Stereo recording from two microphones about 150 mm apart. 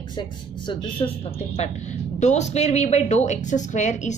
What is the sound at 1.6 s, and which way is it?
Speech, 50° left (ahead or behind).